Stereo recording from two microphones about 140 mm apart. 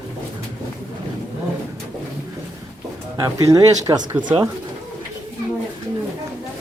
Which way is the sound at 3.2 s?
25° right (ahead or behind).